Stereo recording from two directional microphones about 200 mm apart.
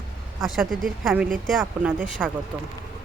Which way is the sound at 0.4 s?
Centre (ahead or behind).